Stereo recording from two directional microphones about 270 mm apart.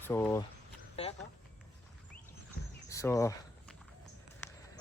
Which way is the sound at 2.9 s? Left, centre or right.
Centre.